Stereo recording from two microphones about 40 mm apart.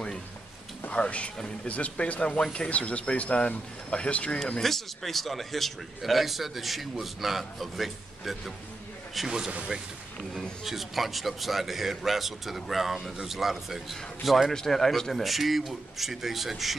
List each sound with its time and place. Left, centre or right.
0.8 s speech: left
4.6 s a man's voice: centre
10.6 s a man's voice: centre
14.5 s speech: centre
15.2 s a man's voice: centre